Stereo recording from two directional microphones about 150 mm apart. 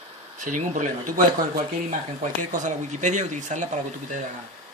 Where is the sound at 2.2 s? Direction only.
55° right (ahead or behind).